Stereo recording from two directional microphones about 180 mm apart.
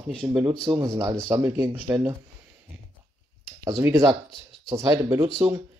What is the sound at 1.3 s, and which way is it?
Speech, 15° right (ahead or behind).